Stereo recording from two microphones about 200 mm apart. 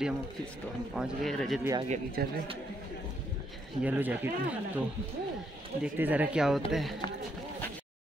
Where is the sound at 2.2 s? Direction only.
50° right (ahead or behind).